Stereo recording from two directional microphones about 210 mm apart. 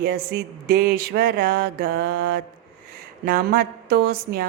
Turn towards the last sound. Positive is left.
turn(degrees=-50)  # may be behind; listen again after turning